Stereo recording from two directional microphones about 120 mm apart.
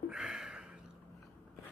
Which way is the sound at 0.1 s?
5° right (ahead or behind).